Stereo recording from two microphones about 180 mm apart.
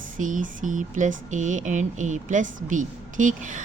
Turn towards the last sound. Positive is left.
turn(degrees=-45)  # may be behind; listen again after turning